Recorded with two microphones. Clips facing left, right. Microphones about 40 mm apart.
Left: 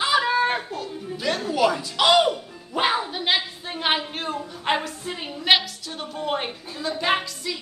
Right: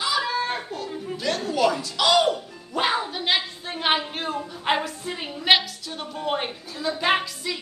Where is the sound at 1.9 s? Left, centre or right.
Left.